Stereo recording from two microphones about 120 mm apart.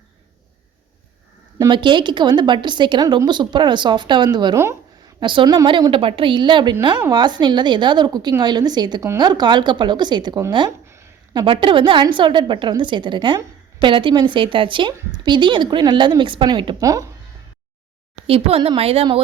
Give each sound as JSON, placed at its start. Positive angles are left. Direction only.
{"t": 1.5, "sound": "a woman's voice", "side_deg": -35}
{"t": 4.5, "sound": "speech", "side_deg": -25}
{"t": 5.2, "sound": "a woman's voice", "side_deg": -45}
{"t": 16.8, "sound": "speech", "side_deg": -25}
{"t": 18.3, "sound": "speech", "side_deg": -55}